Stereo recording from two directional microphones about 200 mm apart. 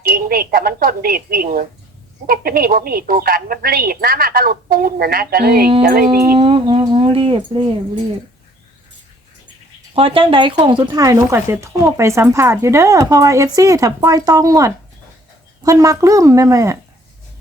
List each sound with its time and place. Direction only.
0.0 s a woman's voice: 45° right (ahead or behind)
6.3 s speech: 25° right (ahead or behind)
9.9 s speech: 25° right (ahead or behind)